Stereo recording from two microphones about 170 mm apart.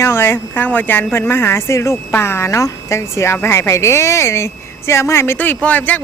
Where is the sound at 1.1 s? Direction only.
15° left (ahead or behind).